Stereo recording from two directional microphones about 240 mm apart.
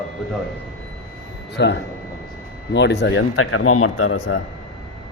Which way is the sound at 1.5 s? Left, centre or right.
Left.